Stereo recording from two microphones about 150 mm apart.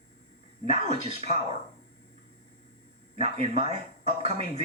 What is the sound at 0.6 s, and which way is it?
Speech, 45° right (ahead or behind).